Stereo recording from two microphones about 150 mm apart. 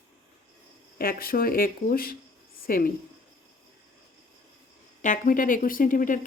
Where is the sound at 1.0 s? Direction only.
75° left (ahead or behind).